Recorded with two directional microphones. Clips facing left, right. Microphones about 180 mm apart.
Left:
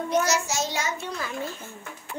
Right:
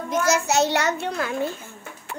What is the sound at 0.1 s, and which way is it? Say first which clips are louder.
A child's voice: right 4 dB; 50° right (ahead or behind).